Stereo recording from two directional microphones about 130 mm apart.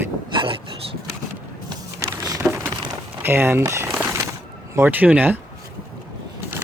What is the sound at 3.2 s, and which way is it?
Speech, 20° right (ahead or behind).